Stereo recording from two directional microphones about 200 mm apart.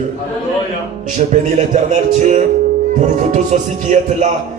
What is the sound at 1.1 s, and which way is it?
Speech, 35° right (ahead or behind).